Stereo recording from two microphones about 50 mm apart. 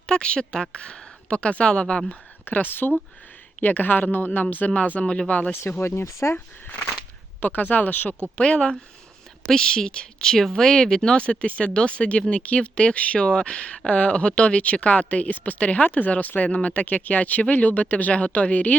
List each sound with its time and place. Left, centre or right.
0.1 s a woman's voice: centre
2.4 s speech: left; by 5.2 s centre
5.8 s speech: left
7.4 s speech: left
8.4 s speech: left